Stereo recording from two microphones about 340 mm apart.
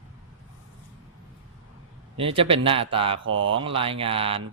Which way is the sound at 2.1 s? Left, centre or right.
Centre.